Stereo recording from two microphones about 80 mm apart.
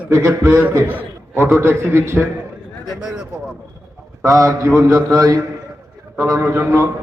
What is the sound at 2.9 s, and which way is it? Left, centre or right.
Speech, centre.